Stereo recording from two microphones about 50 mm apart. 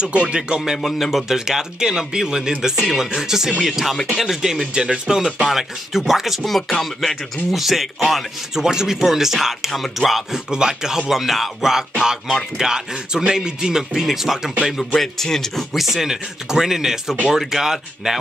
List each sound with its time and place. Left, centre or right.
0.0 s speech: centre
0.6 s a man's voice: centre
7.5 s a man's voice: centre
10.5 s a man's voice: centre
15.0 s speech: centre
15.7 s a man's voice: centre